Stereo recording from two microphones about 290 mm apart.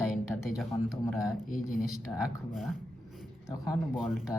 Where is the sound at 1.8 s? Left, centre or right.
Centre.